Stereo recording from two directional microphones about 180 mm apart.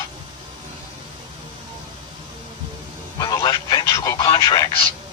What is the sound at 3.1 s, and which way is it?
Speech, 20° left (ahead or behind).